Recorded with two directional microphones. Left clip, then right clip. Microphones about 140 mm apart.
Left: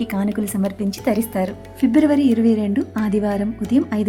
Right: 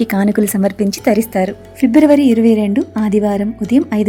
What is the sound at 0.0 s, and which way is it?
A woman's voice, 45° right (ahead or behind).